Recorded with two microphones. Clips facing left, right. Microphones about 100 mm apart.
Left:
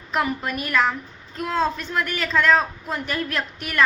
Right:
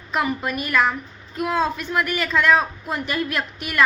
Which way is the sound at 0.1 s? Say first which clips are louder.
Right 1 dB; centre (ahead or behind).